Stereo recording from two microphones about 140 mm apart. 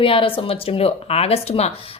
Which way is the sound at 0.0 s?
40° left (ahead or behind).